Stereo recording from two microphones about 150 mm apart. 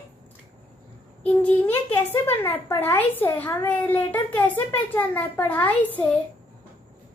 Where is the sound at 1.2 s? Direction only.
10° left (ahead or behind).